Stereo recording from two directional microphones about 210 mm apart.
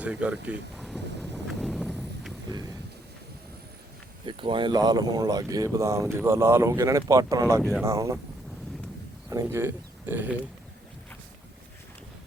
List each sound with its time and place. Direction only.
0.0 s speech: 5° right (ahead or behind)
0.8 s vehicle: centre (ahead or behind)
4.3 s speech: 25° right (ahead or behind)
7.6 s speech: centre (ahead or behind)
7.9 s speech: 15° right (ahead or behind)
9.3 s speech: 10° right (ahead or behind)